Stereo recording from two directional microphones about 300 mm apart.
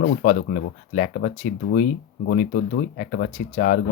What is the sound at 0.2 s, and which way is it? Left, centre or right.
Speech, left.